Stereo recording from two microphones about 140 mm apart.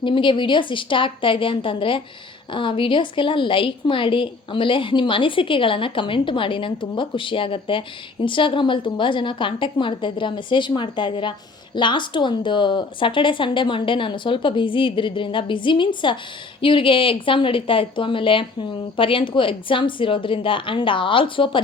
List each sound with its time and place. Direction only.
0.0 s a woman's voice: 35° left (ahead or behind)